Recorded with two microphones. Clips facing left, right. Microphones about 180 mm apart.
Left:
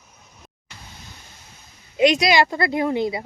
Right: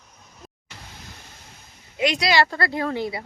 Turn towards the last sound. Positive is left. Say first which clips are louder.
# left 4 dB
turn(degrees=20)  # may be behind; listen again after turning